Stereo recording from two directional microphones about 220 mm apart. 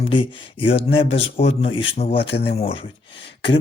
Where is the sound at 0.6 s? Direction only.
55° left (ahead or behind).